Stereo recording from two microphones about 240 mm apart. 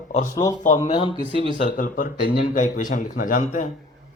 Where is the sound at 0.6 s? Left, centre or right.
Left.